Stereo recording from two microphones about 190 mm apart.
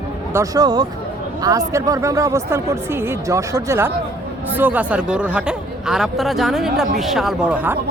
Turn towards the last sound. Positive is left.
turn(degrees=-10)  # may be behind; listen again after turning